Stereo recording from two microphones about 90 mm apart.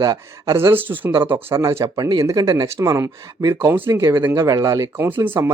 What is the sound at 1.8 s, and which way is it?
Speech, 45° right (ahead or behind).